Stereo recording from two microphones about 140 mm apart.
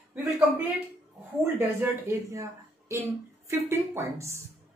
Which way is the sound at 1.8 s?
20° right (ahead or behind).